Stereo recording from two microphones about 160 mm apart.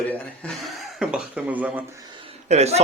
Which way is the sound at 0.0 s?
10° left (ahead or behind).